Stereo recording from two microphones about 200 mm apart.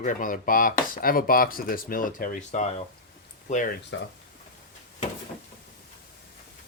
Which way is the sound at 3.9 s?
70° left (ahead or behind).